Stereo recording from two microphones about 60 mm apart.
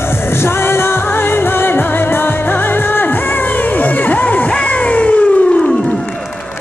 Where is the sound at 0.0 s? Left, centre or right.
Left.